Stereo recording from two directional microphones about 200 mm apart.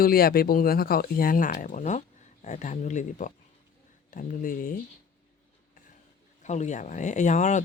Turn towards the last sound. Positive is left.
turn(degrees=40)  # may be behind; listen again after turning